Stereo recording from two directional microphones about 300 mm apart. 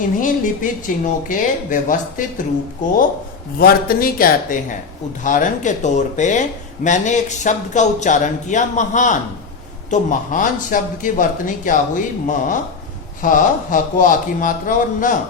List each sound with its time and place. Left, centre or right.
0.2 s speech: left
3.6 s speech: left